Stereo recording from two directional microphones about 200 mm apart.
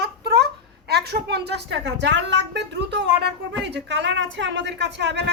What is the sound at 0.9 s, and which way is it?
Speech, 55° right (ahead or behind).